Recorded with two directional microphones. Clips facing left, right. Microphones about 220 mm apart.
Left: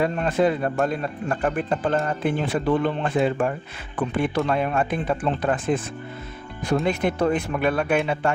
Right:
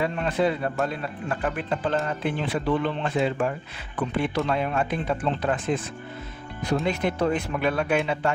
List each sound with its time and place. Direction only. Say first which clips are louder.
0.0 s speech: left 3 dB; 45° left (ahead or behind)
6.8 s speech: left 2 dB; 50° left (ahead or behind)